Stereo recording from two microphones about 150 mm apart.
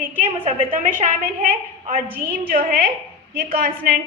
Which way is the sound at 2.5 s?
75° right (ahead or behind).